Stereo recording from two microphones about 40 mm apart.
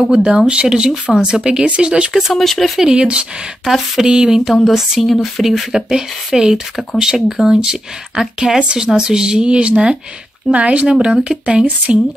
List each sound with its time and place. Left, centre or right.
0.1 s speech: right
0.5 s a sound: right
1.1 s speech: centre
2.3 s speech: centre
2.8 s speech: right
3.6 s a sound: centre
5.4 s speech: centre
5.8 s a sound: centre
8.5 s speech: centre
11.6 s speech: right